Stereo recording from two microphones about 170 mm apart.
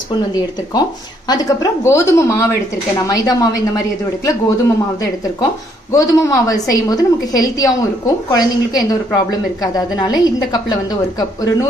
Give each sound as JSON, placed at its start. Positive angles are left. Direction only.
{"t": 0.1, "sound": "a woman's voice", "side_deg": 25}